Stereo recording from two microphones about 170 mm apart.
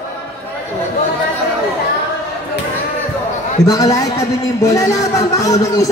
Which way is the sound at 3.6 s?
20° left (ahead or behind).